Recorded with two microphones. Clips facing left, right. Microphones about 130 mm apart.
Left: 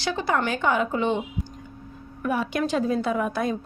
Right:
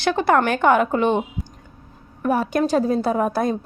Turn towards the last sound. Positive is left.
turn(degrees=-40)  # may be behind; listen again after turning